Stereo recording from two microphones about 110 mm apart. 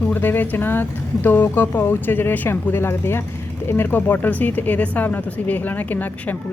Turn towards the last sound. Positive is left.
turn(degrees=15)  # may be behind; listen again after turning